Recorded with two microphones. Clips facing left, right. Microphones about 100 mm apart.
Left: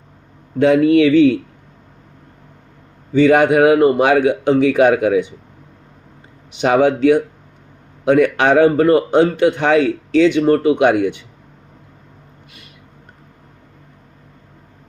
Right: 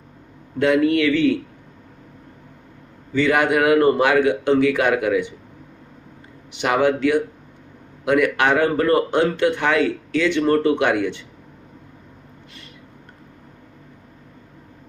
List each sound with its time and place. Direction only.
0.6 s a man's voice: 20° left (ahead or behind)
3.2 s a man's voice: 20° left (ahead or behind)
6.6 s a man's voice: 20° left (ahead or behind)